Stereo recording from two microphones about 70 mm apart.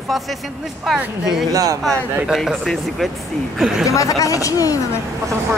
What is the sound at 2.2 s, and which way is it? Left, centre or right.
Speech, centre.